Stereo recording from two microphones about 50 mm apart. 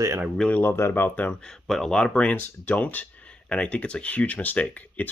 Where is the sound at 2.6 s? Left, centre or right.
Left.